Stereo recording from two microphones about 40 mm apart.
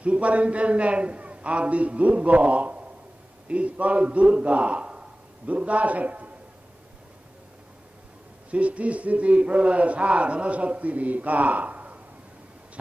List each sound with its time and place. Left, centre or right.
0.0 s a man's voice: right
8.5 s a man's voice: right